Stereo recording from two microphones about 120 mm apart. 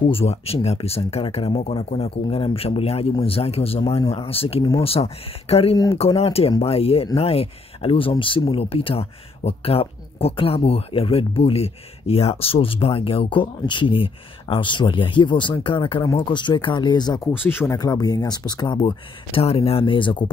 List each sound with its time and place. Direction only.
0.1 s speech: 55° left (ahead or behind); by 17.2 s 35° left (ahead or behind)
17.2 s speech: 20° left (ahead or behind); by 20.2 s 45° left (ahead or behind)